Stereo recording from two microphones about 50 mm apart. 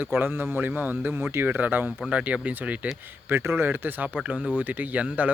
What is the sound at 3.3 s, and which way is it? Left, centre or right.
Speech, right.